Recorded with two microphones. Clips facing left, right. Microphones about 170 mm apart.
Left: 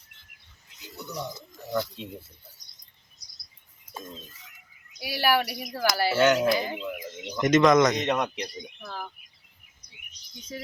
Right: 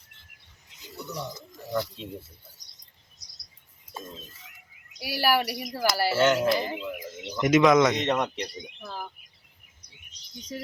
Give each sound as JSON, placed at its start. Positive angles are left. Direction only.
{"t": 0.9, "sound": "a man's voice", "side_deg": 0}
{"t": 3.2, "sound": "bird vocalization", "side_deg": -90}
{"t": 4.9, "sound": "a man's voice", "side_deg": -5}